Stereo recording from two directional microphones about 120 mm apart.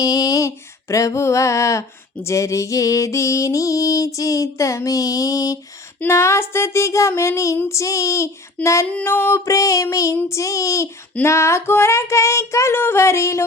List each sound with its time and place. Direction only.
0.0 s female singing: 30° left (ahead or behind)
2.2 s music: 25° left (ahead or behind)